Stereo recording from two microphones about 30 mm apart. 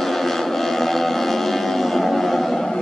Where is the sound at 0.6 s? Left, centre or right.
Centre.